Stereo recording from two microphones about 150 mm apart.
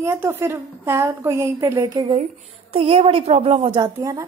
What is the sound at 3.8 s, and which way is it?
Speech, 25° right (ahead or behind).